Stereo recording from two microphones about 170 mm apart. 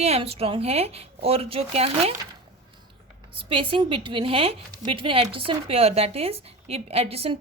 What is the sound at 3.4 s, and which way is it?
Speech, 30° right (ahead or behind).